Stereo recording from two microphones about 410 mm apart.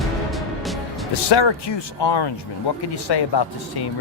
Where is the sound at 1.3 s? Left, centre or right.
Left.